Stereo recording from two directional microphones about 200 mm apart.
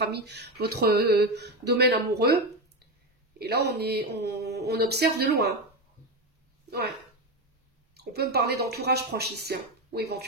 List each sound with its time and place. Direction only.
0.0 s speech: 55° right (ahead or behind)
7.9 s speech: 55° right (ahead or behind)